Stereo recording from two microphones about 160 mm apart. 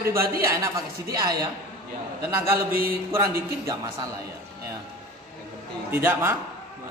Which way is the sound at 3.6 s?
20° right (ahead or behind).